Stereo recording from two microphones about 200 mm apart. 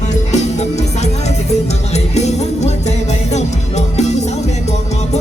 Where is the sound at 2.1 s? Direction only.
35° left (ahead or behind).